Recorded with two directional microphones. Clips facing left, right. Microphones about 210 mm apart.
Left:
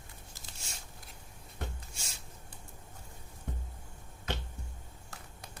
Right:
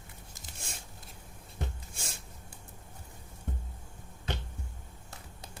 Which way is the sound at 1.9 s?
50° right (ahead or behind).